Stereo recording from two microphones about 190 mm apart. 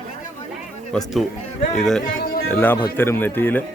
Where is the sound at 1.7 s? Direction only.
Centre (ahead or behind).